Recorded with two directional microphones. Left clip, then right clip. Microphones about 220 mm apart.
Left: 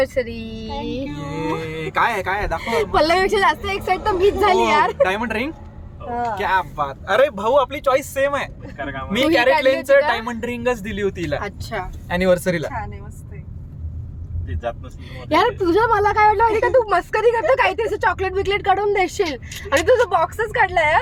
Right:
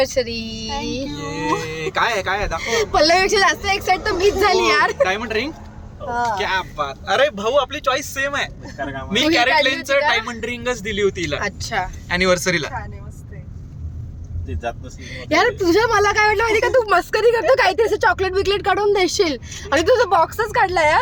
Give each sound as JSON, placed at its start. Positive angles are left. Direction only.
{"t": 0.0, "sound": "a woman's voice", "side_deg": -5}
{"t": 1.6, "sound": "speech", "side_deg": 45}
{"t": 2.6, "sound": "speech", "side_deg": 5}
{"t": 5.0, "sound": "speech", "side_deg": 50}
{"t": 8.8, "sound": "speech", "side_deg": -25}
{"t": 9.6, "sound": "a man's voice", "side_deg": 45}
{"t": 11.4, "sound": "a woman's voice", "side_deg": -5}
{"t": 12.0, "sound": "speech", "side_deg": 20}
{"t": 15.1, "sound": "a woman's voice", "side_deg": 0}